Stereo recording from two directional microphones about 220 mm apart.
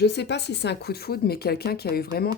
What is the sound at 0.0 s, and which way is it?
Speech, 50° left (ahead or behind).